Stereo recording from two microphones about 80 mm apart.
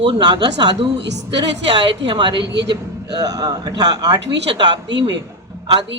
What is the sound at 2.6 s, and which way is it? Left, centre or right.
A woman's voice, right.